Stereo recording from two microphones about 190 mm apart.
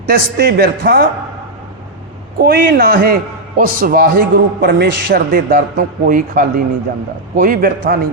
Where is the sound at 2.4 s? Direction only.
50° right (ahead or behind).